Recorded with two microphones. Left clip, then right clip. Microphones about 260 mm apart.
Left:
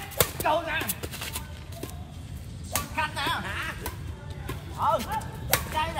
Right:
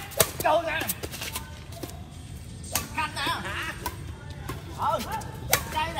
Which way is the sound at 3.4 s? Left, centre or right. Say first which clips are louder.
Right 1 dB; centre.